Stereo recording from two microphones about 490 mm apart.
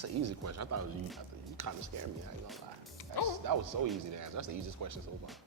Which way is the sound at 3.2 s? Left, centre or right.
Left.